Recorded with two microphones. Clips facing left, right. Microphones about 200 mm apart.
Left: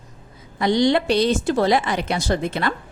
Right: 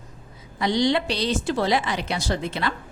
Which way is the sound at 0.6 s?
50° left (ahead or behind).